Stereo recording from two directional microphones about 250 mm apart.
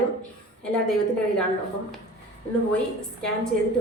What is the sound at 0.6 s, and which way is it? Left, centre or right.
Speech, centre.